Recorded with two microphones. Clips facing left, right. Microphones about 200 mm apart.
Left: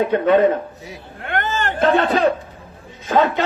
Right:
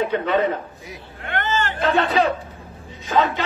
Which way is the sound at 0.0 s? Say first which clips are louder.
Left 6 dB; 50° left (ahead or behind).